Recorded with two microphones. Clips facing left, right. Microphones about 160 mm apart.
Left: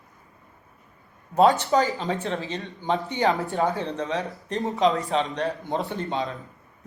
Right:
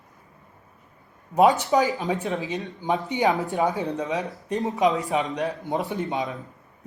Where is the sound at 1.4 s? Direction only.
15° right (ahead or behind).